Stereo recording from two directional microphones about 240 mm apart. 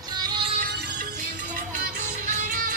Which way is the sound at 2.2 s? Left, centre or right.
Right.